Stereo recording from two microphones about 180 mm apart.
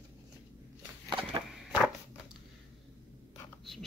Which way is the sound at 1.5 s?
5° right (ahead or behind).